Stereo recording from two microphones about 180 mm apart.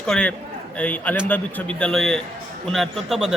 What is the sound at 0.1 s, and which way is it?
A man's voice, 5° left (ahead or behind).